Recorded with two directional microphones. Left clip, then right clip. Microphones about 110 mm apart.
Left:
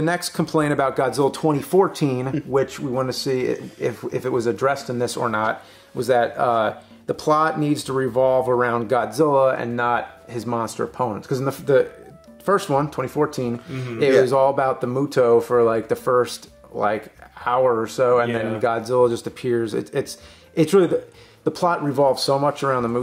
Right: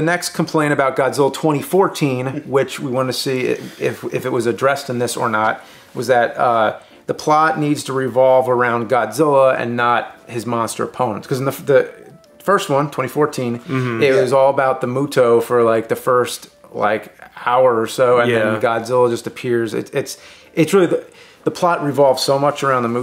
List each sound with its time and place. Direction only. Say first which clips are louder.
0.0 s speech: right 4 dB; 45° left (ahead or behind)
13.7 s speech: right 11 dB; centre (ahead or behind)
13.9 s speech: right 2 dB; 40° left (ahead or behind)
17.6 s speech: right 4 dB; 30° left (ahead or behind)